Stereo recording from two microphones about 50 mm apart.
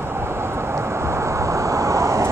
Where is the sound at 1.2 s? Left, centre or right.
Right.